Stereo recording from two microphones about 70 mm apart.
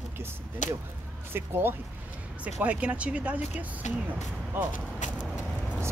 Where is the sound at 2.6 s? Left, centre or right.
Centre.